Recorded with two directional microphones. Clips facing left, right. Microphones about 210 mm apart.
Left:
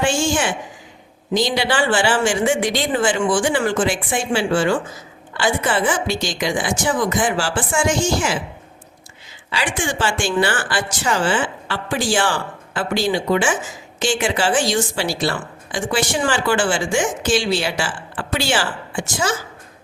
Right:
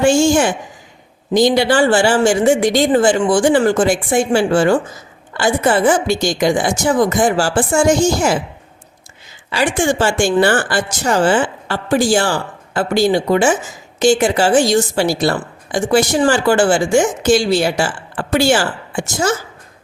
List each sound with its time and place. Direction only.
0.0 s a woman's voice: 40° right (ahead or behind)
9.5 s a woman's voice: 45° right (ahead or behind)